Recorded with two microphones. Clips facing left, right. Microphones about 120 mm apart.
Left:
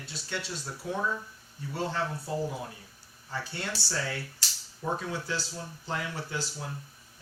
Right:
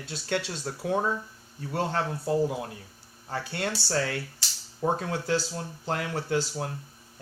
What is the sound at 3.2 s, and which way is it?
Speech, 65° right (ahead or behind).